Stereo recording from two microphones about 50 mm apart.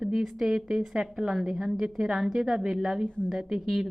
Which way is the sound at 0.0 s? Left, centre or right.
Centre.